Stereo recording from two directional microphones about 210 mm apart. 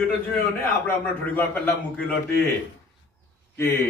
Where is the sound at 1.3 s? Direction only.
5° left (ahead or behind).